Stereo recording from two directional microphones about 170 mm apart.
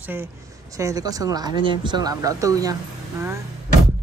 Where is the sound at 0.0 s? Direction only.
10° right (ahead or behind).